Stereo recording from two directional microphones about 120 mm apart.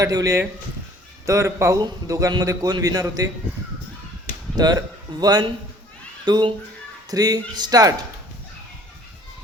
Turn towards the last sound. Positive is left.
turn(degrees=-30)  # may be behind; listen again after turning